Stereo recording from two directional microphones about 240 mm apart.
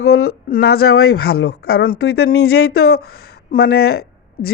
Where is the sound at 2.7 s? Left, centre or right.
Left.